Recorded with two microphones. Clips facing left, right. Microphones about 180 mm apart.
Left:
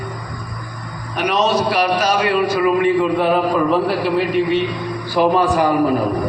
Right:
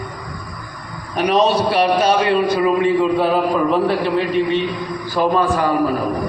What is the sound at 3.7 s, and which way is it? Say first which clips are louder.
Speech: even; 5° left (ahead or behind).